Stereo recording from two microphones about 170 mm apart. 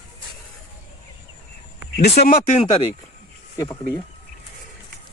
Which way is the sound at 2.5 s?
35° left (ahead or behind).